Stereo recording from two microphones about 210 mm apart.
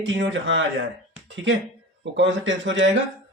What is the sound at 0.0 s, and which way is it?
Speech, 60° right (ahead or behind).